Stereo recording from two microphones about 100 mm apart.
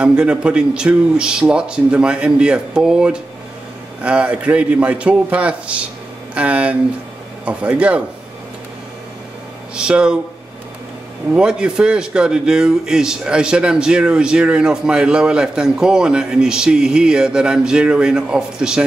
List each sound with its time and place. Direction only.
0.0 s speech: 10° right (ahead or behind)
9.8 s speech: 10° right (ahead or behind)
11.3 s speech: 10° right (ahead or behind)